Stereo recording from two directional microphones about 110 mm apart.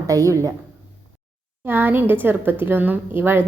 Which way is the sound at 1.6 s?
20° right (ahead or behind).